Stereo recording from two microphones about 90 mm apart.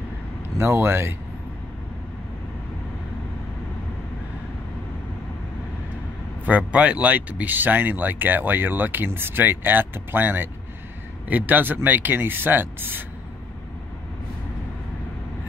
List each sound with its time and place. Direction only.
0.6 s speech: 30° right (ahead or behind)
6.4 s speech: 15° right (ahead or behind)